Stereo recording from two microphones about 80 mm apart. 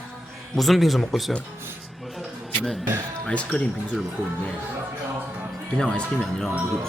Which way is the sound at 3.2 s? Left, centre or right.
Centre.